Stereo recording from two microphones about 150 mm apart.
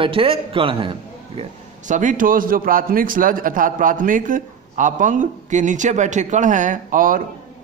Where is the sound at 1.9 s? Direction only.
60° right (ahead or behind).